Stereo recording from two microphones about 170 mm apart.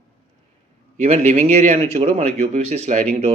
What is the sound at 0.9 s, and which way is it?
Speech, 40° right (ahead or behind).